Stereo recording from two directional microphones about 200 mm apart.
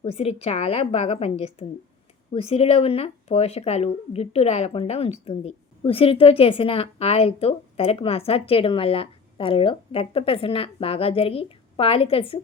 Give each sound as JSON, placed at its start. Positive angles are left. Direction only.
{"t": 0.0, "sound": "a woman's voice", "side_deg": 30}